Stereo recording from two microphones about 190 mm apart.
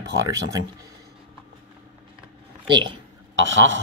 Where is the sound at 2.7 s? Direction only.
25° right (ahead or behind).